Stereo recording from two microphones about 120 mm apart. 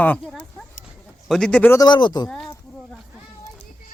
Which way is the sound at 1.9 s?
40° left (ahead or behind).